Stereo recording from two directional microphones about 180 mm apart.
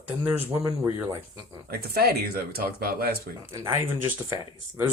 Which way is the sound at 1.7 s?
60° right (ahead or behind).